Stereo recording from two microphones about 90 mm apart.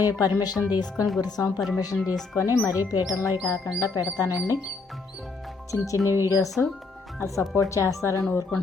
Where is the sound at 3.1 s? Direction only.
40° left (ahead or behind).